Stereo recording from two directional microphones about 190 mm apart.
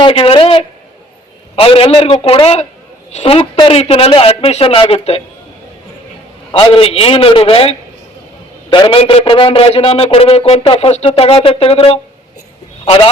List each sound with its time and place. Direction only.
0.0 s a man's voice: 30° left (ahead or behind)
6.5 s a man's voice: 30° left (ahead or behind)